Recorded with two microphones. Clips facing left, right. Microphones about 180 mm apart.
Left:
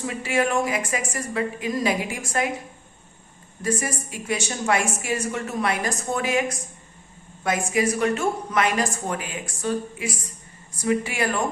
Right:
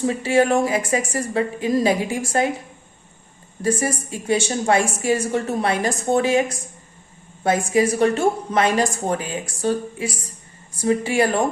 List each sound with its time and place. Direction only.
0.0 s a woman's voice: 30° right (ahead or behind)
3.6 s a woman's voice: 30° right (ahead or behind)
7.4 s a woman's voice: 30° right (ahead or behind)